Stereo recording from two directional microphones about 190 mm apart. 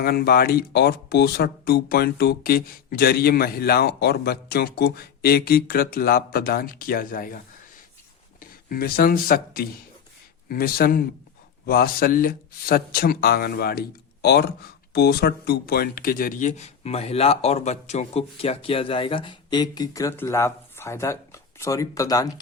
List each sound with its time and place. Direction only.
0.0 s speech: 55° left (ahead or behind); by 22.3 s 20° left (ahead or behind)